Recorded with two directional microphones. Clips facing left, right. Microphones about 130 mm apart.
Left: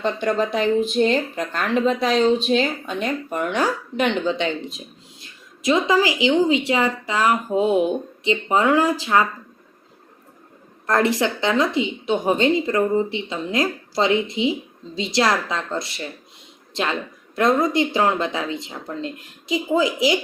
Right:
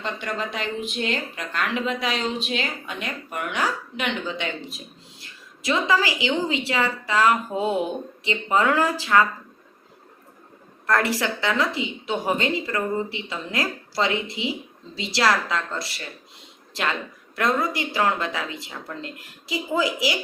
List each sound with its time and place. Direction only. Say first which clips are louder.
0.0 s speech: left 8 dB; 35° left (ahead or behind)
5.6 s a woman's voice: left 4 dB; 20° left (ahead or behind)
10.8 s a woman's voice: left 3 dB; 20° left (ahead or behind)
17.3 s a woman's voice: left 6 dB; 20° left (ahead or behind)